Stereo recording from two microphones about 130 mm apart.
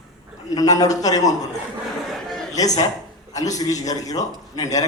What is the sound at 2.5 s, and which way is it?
A man's voice, 30° left (ahead or behind).